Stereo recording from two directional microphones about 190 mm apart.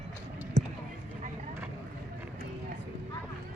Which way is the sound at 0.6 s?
40° right (ahead or behind).